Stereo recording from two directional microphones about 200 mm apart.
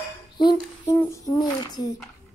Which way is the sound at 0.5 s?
15° left (ahead or behind).